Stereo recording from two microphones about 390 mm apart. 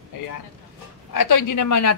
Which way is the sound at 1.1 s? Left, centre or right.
Left.